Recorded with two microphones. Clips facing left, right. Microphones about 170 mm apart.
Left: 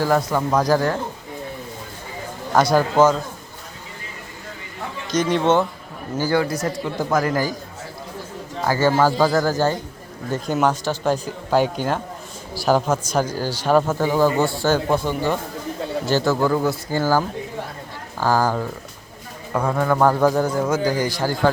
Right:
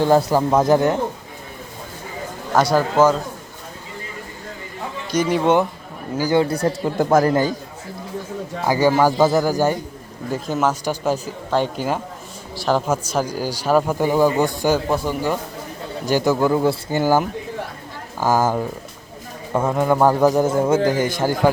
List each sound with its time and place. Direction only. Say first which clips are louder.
0.0 s a man's voice: right 4 dB; 30° right (ahead or behind)
2.6 s speech: even; 10° right (ahead or behind)
5.1 s speech: right 1 dB; 10° right (ahead or behind)
6.4 s speech: right 4 dB; 30° right (ahead or behind)
7.0 s a man's voice: right 5 dB; 45° right (ahead or behind)
7.3 s a man's voice: right 4 dB; 25° right (ahead or behind)
8.6 s speech: right 1 dB; 15° right (ahead or behind)
10.3 s a man's voice: left 1 dB; centre (ahead or behind); by 21.5 s 20° right (ahead or behind)